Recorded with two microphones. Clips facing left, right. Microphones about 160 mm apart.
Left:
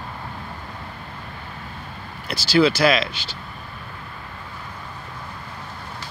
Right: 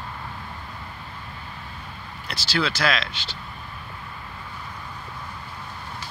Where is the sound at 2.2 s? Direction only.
5° left (ahead or behind).